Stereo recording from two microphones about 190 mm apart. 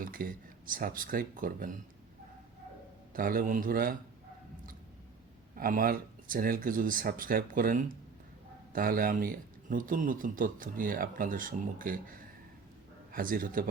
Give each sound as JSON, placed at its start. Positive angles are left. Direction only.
{"t": 0.0, "sound": "speech", "side_deg": -50}
{"t": 3.1, "sound": "speech", "side_deg": -50}
{"t": 5.5, "sound": "a man's voice", "side_deg": -50}